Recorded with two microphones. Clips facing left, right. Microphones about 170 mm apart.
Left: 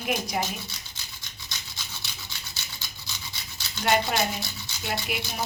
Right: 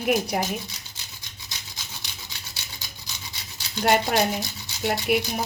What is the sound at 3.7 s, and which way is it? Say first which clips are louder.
Speech: right 4 dB; 40° right (ahead or behind).